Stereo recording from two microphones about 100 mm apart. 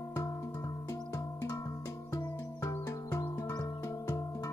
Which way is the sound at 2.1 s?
30° left (ahead or behind).